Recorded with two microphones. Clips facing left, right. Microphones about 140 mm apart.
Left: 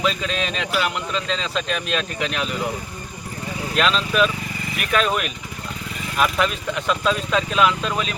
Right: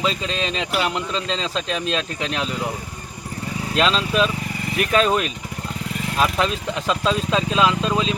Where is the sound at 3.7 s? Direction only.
30° right (ahead or behind).